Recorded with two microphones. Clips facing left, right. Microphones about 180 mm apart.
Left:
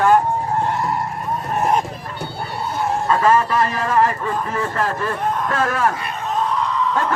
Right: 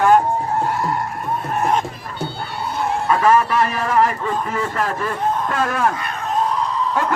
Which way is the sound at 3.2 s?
10° right (ahead or behind).